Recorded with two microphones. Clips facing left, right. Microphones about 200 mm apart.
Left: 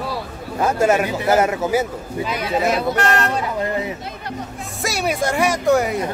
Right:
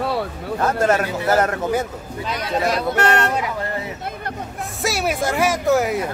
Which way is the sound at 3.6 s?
20° left (ahead or behind).